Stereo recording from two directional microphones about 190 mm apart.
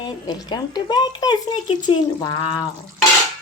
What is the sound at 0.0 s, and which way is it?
A child's voice, 20° left (ahead or behind).